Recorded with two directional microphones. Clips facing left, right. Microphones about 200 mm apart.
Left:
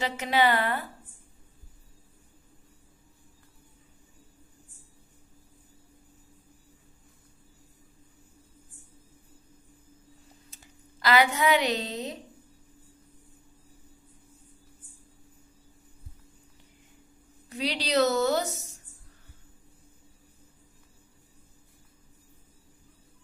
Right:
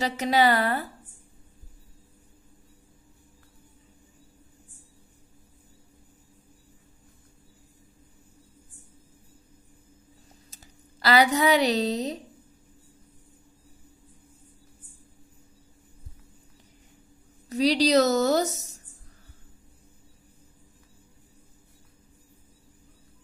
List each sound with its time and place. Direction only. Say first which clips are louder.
0.0 s a woman's voice: right 3 dB; 40° right (ahead or behind)
10.5 s speech: right 1 dB; 35° right (ahead or behind)
17.5 s a woman's voice: right 9 dB; 40° right (ahead or behind)